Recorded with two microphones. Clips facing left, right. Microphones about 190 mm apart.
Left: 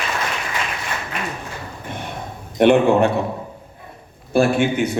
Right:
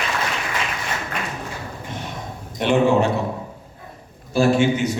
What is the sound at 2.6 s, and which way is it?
Speech, 55° left (ahead or behind).